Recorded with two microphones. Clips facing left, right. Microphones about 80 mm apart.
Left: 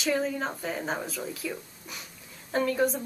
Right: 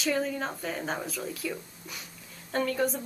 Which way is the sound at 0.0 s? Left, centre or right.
Centre.